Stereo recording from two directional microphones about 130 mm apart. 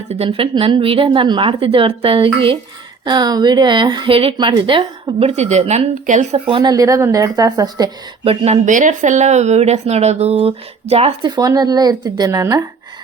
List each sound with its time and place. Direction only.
0.1 s a woman's voice: 50° right (ahead or behind)
5.4 s speech: 60° right (ahead or behind); by 6.2 s 75° right (ahead or behind)
6.3 s a woman's voice: 45° right (ahead or behind)
8.2 s a woman's voice: 45° right (ahead or behind)
8.6 s speech: 75° right (ahead or behind); by 11.1 s 50° right (ahead or behind)
11.2 s a woman's voice: 35° right (ahead or behind)